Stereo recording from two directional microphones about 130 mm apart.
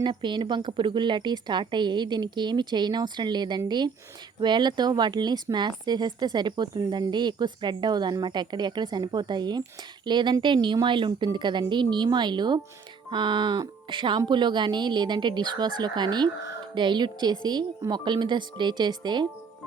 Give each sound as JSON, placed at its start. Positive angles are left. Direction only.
{"t": 0.0, "sound": "a woman's voice", "side_deg": -35}